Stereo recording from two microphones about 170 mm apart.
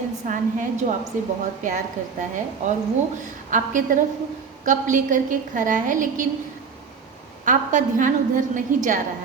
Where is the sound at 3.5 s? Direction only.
50° right (ahead or behind).